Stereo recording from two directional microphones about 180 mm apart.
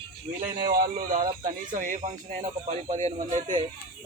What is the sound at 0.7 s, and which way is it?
Speech, 50° right (ahead or behind).